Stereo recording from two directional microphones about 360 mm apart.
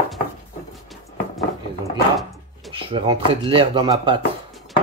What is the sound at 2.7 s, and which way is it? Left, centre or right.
Speech, centre.